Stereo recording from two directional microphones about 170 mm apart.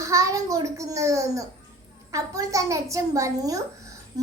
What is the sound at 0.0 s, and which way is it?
A child's voice, 20° right (ahead or behind).